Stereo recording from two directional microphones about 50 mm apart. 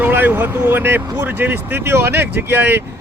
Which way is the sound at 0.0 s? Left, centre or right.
Right.